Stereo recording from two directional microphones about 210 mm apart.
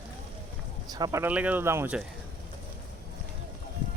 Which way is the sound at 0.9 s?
15° right (ahead or behind).